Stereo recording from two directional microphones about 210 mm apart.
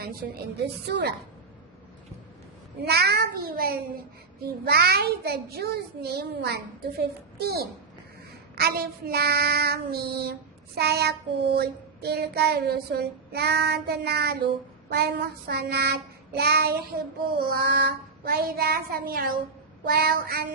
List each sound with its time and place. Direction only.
0.6 s child singing: 50° right (ahead or behind)
2.8 s child singing: 50° right (ahead or behind)